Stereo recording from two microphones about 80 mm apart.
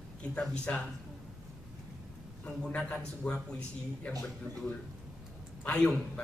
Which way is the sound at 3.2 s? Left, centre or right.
Centre.